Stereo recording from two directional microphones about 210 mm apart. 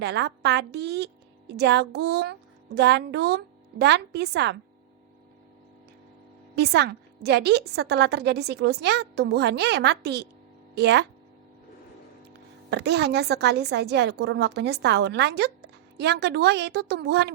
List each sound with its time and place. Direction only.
0.0 s a woman's voice: 55° right (ahead or behind)
6.6 s a woman's voice: 55° right (ahead or behind)
12.7 s a woman's voice: 50° right (ahead or behind)